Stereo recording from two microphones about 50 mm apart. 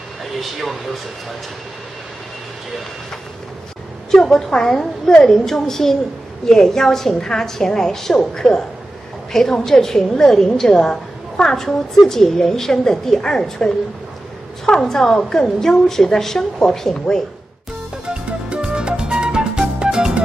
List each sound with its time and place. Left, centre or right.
0.2 s speech: centre
4.1 s a woman's voice: centre
14.8 s a woman's voice: centre
18.0 s music: centre